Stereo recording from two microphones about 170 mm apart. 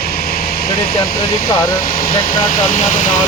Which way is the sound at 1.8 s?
55° left (ahead or behind).